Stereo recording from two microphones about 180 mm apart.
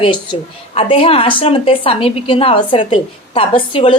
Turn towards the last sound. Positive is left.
turn(degrees=30)  # may be behind; listen again after turning